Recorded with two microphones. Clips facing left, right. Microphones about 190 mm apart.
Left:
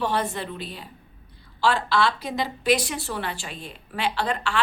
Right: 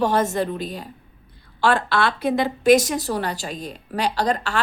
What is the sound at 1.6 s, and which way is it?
A woman's voice, 55° right (ahead or behind).